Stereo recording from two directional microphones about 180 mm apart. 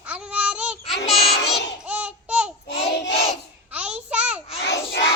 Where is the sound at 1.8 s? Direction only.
5° right (ahead or behind).